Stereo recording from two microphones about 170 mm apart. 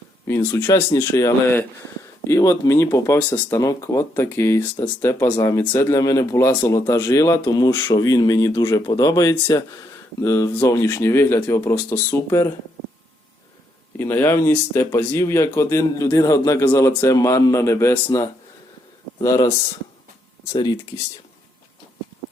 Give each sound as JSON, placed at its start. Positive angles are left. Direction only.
{"t": 0.3, "sound": "speech", "side_deg": 15}
{"t": 14.0, "sound": "speech", "side_deg": 15}